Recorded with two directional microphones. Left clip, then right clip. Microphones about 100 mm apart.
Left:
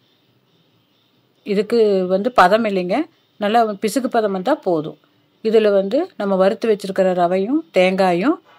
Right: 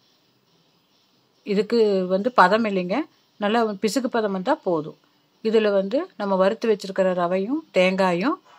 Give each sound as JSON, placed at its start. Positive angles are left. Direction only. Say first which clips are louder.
{"t": 1.4, "sound": "a woman's voice", "louder": "left 4 dB", "side_deg": 30}